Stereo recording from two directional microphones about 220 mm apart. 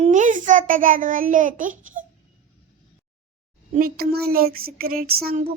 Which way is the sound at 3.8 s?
45° right (ahead or behind).